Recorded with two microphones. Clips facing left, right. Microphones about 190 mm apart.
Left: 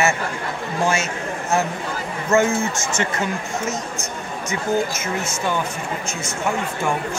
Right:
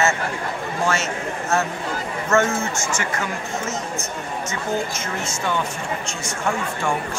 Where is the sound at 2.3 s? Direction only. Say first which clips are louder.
Left 2 dB; 15° left (ahead or behind).